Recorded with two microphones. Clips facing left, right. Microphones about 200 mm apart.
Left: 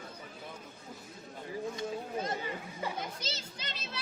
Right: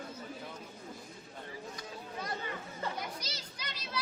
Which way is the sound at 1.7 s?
25° left (ahead or behind).